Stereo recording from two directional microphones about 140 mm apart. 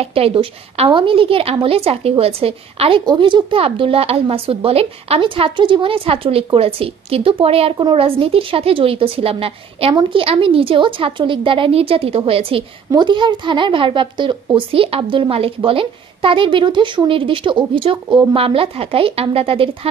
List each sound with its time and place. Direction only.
0.0 s a woman's voice: 45° right (ahead or behind)